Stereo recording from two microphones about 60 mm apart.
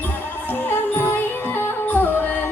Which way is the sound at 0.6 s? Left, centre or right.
Left.